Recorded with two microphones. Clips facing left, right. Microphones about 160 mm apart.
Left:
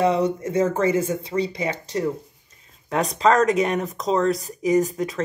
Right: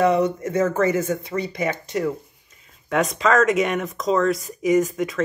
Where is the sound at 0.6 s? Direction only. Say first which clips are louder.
Even; 30° left (ahead or behind).